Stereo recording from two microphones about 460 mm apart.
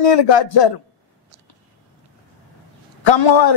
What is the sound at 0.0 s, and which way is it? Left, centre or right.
Speech, left.